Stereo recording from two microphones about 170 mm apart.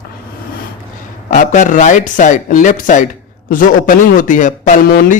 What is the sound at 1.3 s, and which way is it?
Speech, 50° left (ahead or behind).